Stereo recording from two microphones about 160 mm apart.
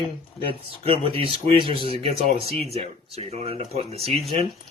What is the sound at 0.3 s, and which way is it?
Speech, 35° right (ahead or behind).